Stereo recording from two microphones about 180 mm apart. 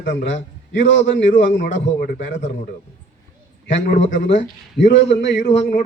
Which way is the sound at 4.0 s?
90° left.